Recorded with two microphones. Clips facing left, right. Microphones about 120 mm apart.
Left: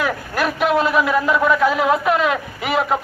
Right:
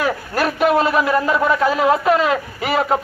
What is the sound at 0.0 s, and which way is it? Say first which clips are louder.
A man's voice: right 1 dB; centre (ahead or behind).